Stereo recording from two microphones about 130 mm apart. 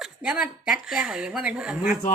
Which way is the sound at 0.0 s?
10° right (ahead or behind).